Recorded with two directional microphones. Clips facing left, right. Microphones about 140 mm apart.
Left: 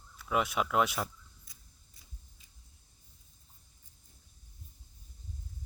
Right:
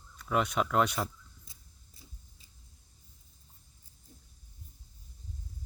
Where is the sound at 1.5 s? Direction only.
25° right (ahead or behind).